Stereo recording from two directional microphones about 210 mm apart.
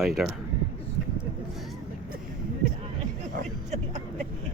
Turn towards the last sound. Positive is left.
turn(degrees=-35)  # may be behind; listen again after turning